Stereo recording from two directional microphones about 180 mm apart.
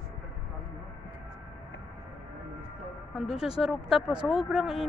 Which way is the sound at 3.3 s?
5° right (ahead or behind).